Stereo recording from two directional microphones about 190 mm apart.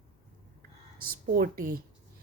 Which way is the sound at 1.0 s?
50° right (ahead or behind).